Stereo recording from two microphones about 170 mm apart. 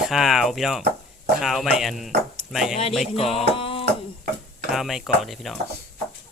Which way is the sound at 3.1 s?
35° left (ahead or behind).